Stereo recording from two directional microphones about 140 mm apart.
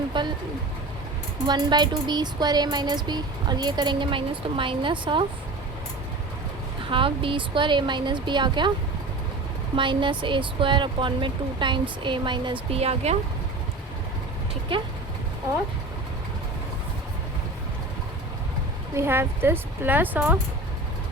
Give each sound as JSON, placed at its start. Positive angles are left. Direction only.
{"t": 0.1, "sound": "a sound", "side_deg": -30}
{"t": 1.5, "sound": "speech", "side_deg": -30}
{"t": 6.9, "sound": "speech", "side_deg": -40}
{"t": 9.7, "sound": "speech", "side_deg": -35}
{"t": 18.9, "sound": "speech", "side_deg": -15}